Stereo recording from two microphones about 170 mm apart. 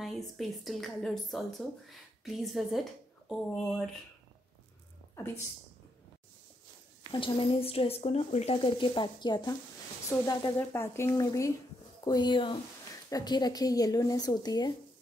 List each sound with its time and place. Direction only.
0.0 s speech: centre (ahead or behind)
5.1 s a woman's voice: 15° left (ahead or behind)
7.1 s a woman's voice: 30° left (ahead or behind)